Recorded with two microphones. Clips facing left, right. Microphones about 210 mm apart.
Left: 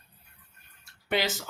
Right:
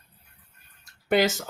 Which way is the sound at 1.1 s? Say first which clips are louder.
Right 7 dB; 45° right (ahead or behind).